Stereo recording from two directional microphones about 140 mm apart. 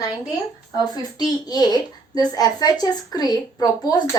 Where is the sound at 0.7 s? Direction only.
30° left (ahead or behind).